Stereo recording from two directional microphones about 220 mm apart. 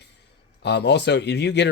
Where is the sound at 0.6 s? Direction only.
50° left (ahead or behind).